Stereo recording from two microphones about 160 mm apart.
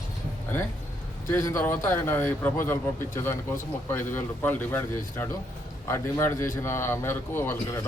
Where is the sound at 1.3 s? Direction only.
15° left (ahead or behind).